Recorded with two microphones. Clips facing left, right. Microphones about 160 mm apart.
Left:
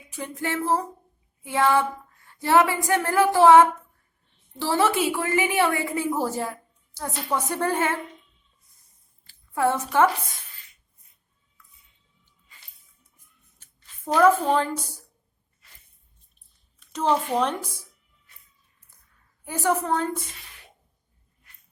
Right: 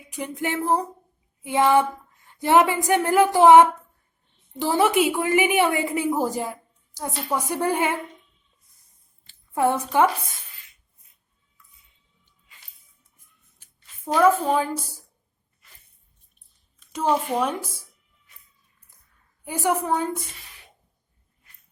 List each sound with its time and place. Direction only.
0.1 s a woman's voice: 15° right (ahead or behind)
9.2 s a sound: 20° right (ahead or behind)
13.6 s speech: 5° right (ahead or behind)
16.9 s a woman's voice: 10° right (ahead or behind)
19.5 s a woman's voice: 15° right (ahead or behind)